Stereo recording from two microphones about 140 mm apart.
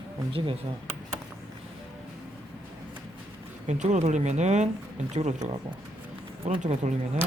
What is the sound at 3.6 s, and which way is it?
Speech, 55° right (ahead or behind).